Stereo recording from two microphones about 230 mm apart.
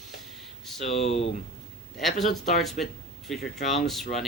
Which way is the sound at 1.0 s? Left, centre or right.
Left.